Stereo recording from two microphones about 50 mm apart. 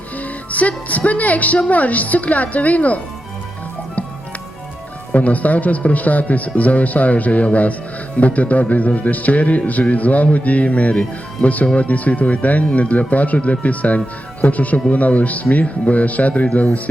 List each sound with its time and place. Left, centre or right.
0.2 s a woman's voice: left
5.1 s a woman's voice: left